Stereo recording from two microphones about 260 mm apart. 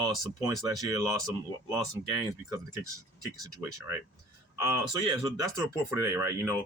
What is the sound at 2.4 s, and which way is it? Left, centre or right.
Speech, centre.